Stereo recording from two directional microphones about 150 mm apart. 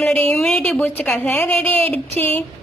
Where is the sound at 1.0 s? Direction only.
10° left (ahead or behind).